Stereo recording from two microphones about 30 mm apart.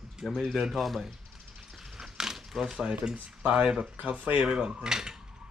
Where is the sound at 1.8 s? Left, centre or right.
Centre.